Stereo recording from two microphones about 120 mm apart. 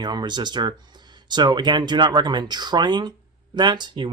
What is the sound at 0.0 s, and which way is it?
Speech, 35° right (ahead or behind).